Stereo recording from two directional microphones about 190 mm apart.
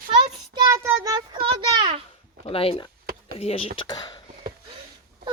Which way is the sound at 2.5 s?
30° left (ahead or behind).